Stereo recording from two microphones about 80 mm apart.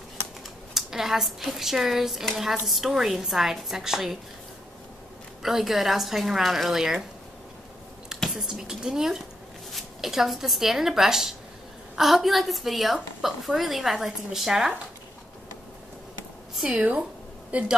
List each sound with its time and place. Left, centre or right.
0.7 s a woman's voice: centre
5.4 s a woman's voice: centre
8.4 s a woman's voice: centre
16.6 s a woman's voice: centre